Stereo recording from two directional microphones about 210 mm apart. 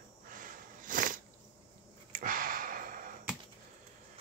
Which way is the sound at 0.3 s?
40° right (ahead or behind).